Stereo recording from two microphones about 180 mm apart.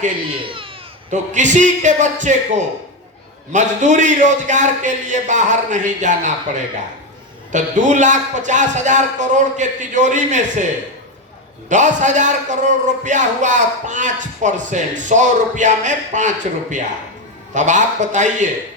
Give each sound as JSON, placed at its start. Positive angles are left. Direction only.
{"t": 0.3, "sound": "a sound", "side_deg": -30}
{"t": 1.1, "sound": "a man's voice", "side_deg": -45}
{"t": 11.7, "sound": "a man's voice", "side_deg": -45}